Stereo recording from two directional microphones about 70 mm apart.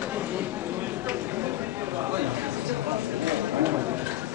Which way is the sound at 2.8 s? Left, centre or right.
Right.